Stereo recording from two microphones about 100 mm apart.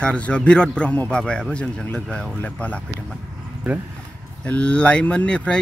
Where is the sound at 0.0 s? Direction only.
10° left (ahead or behind).